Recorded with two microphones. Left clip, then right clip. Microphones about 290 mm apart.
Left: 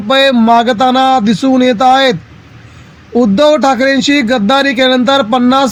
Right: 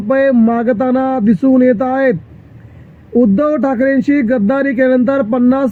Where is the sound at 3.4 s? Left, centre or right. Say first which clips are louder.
Left 6 dB; centre.